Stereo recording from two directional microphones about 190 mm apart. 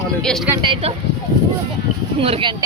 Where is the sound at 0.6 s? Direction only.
30° right (ahead or behind).